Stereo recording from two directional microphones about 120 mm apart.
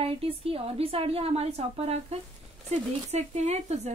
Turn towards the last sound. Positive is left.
turn(degrees=-70)  # may be behind; listen again after turning